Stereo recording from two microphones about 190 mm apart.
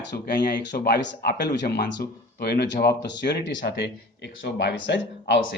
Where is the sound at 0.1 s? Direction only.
65° left (ahead or behind).